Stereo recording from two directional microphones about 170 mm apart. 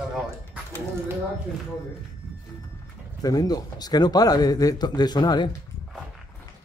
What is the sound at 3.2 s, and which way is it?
Speech, 20° left (ahead or behind).